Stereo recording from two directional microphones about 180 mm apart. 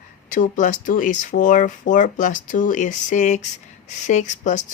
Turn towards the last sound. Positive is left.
turn(degrees=45)  # may be behind; listen again after turning